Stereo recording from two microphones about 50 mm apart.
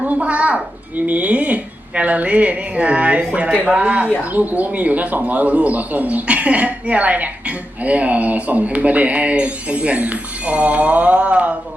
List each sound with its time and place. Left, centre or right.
0.0 s speech: right